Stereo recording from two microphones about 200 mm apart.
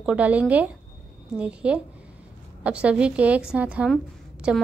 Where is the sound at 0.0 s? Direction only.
5° right (ahead or behind).